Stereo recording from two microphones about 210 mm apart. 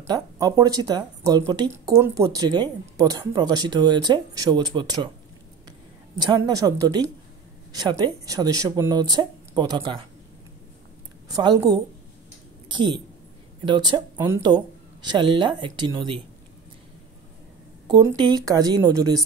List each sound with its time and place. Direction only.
0.0 s a woman's voice: 20° right (ahead or behind)
11.2 s speech: 15° right (ahead or behind)
17.8 s speech: 20° right (ahead or behind)